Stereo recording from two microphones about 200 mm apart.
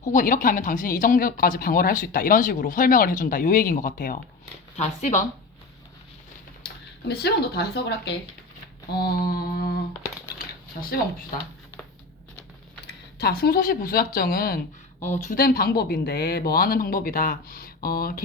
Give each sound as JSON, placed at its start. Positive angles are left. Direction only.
{"t": 0.0, "sound": "speech", "side_deg": 40}
{"t": 6.6, "sound": "a sound", "side_deg": 55}
{"t": 7.1, "sound": "speech", "side_deg": 55}
{"t": 8.9, "sound": "mantra", "side_deg": 50}
{"t": 10.3, "sound": "coin", "side_deg": 45}
{"t": 13.1, "sound": "speech", "side_deg": 50}